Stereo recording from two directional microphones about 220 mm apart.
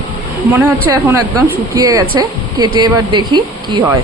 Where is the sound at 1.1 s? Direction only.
15° right (ahead or behind).